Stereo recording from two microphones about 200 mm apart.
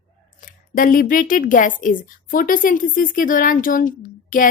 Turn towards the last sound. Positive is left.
turn(degrees=40)  # may be behind; listen again after turning